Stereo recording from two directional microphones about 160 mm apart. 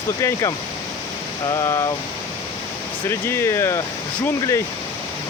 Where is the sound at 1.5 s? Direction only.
20° left (ahead or behind).